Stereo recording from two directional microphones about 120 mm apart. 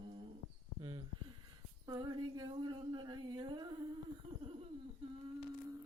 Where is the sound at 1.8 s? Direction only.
35° right (ahead or behind).